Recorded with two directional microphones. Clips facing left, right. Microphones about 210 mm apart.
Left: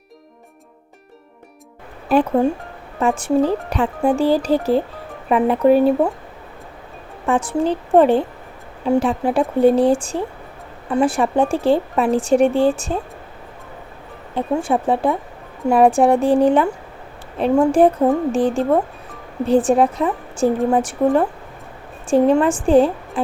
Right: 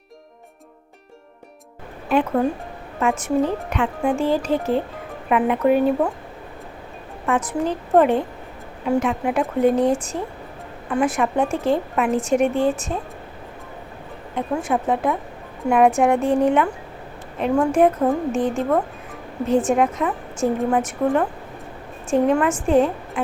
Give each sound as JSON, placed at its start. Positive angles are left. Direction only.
{"t": 2.0, "sound": "a woman's voice", "side_deg": 35}
{"t": 7.3, "sound": "a woman's voice", "side_deg": 30}
{"t": 14.3, "sound": "a woman's voice", "side_deg": 30}